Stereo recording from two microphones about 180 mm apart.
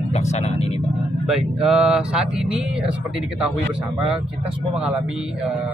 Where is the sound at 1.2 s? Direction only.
5° right (ahead or behind).